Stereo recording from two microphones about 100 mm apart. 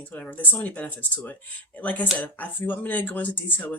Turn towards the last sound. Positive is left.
turn(degrees=20)  # may be behind; listen again after turning